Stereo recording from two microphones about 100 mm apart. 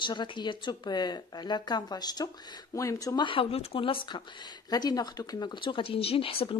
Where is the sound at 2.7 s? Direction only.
30° left (ahead or behind).